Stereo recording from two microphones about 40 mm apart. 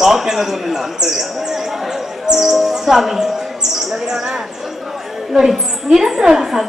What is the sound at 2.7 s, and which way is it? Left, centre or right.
Music, centre.